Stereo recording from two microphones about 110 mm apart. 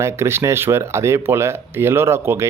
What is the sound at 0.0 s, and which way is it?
Speech, 25° right (ahead or behind).